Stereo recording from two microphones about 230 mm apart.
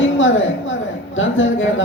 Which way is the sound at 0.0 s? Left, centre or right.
Left.